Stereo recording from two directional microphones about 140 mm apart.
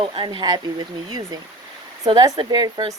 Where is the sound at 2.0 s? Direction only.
25° right (ahead or behind).